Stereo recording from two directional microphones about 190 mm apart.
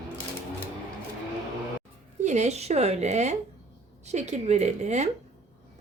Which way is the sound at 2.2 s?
35° right (ahead or behind).